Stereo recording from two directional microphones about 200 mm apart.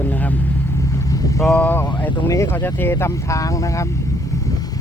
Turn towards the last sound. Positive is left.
turn(degrees=15)  # may be behind; listen again after turning